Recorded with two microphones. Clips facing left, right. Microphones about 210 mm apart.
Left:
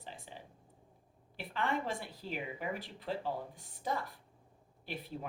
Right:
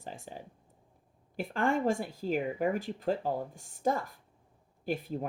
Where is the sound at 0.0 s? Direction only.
45° right (ahead or behind).